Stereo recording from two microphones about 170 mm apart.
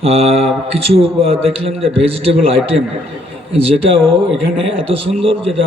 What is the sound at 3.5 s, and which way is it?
A man's voice, 35° right (ahead or behind).